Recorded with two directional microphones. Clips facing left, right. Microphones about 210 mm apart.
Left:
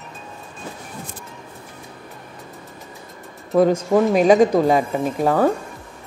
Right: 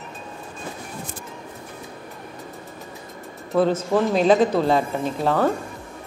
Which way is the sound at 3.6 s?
15° left (ahead or behind).